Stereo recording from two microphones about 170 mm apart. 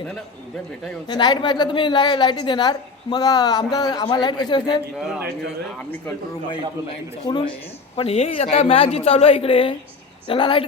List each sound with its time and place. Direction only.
1.0 s a woman's voice: 25° left (ahead or behind)
7.3 s a woman's voice: 25° left (ahead or behind)